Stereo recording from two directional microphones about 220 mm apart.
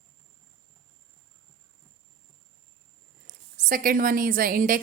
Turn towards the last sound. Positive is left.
turn(degrees=-40)  # may be behind; listen again after turning